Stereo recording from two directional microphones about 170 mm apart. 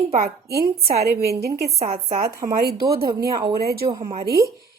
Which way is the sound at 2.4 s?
65° right (ahead or behind).